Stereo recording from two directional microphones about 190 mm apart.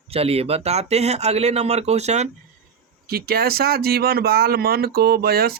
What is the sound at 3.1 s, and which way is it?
Speech, 55° right (ahead or behind).